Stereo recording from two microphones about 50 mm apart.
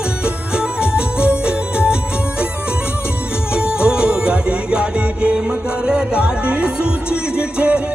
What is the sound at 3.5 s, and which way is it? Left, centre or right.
Music, centre.